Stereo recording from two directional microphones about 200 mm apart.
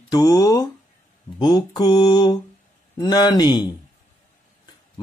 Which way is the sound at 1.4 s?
20° left (ahead or behind).